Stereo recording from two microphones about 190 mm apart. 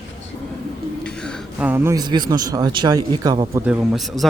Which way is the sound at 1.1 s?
5° left (ahead or behind).